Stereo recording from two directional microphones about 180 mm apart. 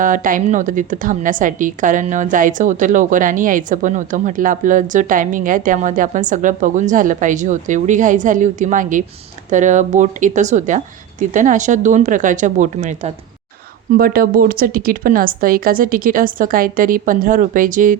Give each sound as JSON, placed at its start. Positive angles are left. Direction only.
{"t": 0.0, "sound": "a woman's voice", "side_deg": -50}
{"t": 13.9, "sound": "a woman's voice", "side_deg": -55}